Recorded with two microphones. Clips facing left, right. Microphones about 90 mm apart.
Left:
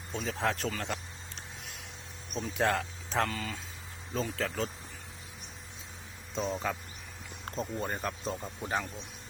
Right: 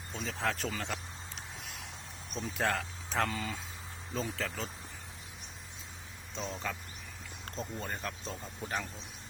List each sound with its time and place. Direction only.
0.1 s speech: centre (ahead or behind)
1.4 s a sound: centre (ahead or behind)
2.3 s speech: centre (ahead or behind)
6.5 s speech: 10° left (ahead or behind)